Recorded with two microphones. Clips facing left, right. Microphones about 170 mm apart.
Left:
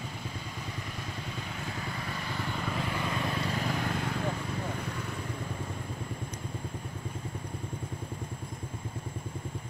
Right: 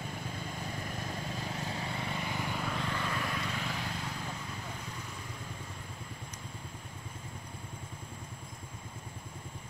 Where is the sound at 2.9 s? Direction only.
15° left (ahead or behind).